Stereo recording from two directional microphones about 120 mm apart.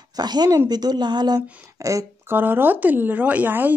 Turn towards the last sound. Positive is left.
turn(degrees=-15)  # may be behind; listen again after turning